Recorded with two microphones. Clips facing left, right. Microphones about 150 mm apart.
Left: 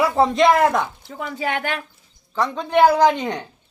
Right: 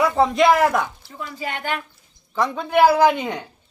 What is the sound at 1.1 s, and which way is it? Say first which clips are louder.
Speech: left 5 dB; 75° left (ahead or behind).